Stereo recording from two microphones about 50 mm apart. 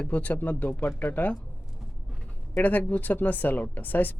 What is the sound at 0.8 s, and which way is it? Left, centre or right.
Speech, left.